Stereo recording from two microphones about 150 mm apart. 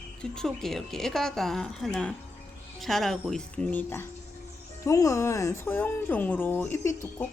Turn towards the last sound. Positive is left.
turn(degrees=20)  # may be behind; listen again after turning